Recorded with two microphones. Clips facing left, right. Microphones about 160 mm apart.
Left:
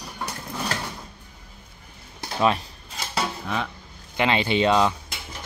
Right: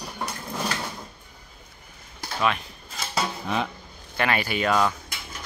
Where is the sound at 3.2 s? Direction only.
5° right (ahead or behind).